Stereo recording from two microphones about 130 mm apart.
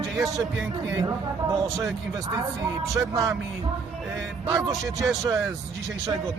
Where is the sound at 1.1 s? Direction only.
25° right (ahead or behind).